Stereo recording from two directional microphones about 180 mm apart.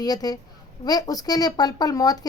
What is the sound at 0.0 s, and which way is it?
A woman's voice, 20° left (ahead or behind).